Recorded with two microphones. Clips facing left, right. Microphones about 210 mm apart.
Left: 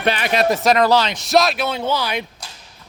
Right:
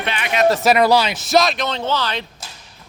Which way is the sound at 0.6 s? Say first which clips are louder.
Right 1 dB; 10° right (ahead or behind).